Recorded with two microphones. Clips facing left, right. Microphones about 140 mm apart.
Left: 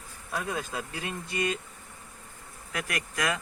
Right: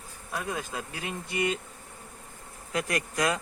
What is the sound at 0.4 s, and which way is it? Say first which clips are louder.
Speech: right 1 dB; 15° right (ahead or behind).